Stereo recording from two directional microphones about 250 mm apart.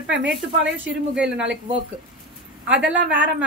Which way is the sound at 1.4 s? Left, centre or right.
Right.